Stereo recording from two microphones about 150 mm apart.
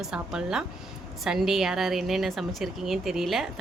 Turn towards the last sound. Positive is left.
turn(degrees=0)  # may be behind; listen again after turning